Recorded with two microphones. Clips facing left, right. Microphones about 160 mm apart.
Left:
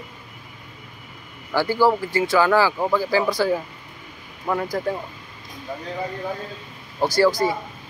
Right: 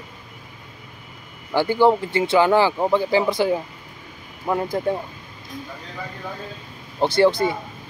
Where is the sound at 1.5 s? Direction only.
20° right (ahead or behind).